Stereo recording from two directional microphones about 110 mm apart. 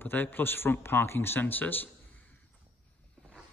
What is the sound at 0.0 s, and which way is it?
Speech, 15° left (ahead or behind).